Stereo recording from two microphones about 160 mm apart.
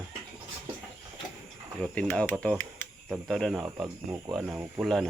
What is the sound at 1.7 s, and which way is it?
Speech, 5° left (ahead or behind).